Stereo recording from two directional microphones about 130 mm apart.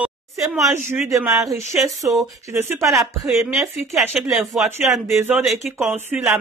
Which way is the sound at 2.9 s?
5° right (ahead or behind).